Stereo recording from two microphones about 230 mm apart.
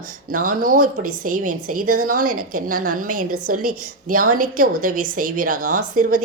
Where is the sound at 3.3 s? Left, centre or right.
Right.